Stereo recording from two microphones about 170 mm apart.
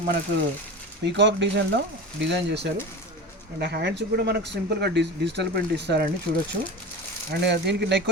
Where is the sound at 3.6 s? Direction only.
75° right (ahead or behind).